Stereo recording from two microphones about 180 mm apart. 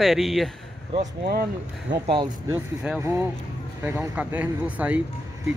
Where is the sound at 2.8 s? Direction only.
15° right (ahead or behind).